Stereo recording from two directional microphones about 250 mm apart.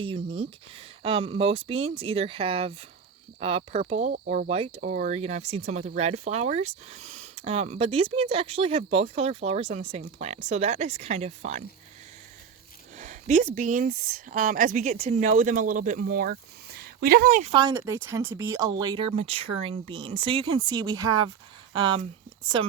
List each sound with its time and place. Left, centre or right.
0.0 s a woman's voice: right
13.0 s a woman's voice: right